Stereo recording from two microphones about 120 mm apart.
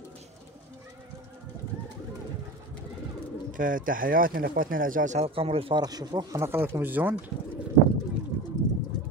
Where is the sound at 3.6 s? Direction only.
90° right.